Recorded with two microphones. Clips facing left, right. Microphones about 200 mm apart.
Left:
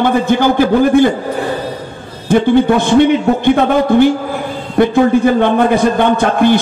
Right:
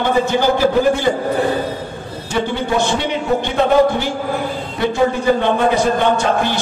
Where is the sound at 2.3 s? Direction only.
55° left (ahead or behind).